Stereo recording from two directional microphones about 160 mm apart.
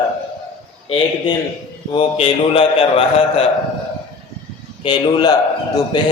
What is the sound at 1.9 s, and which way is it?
A man's voice, 35° left (ahead or behind).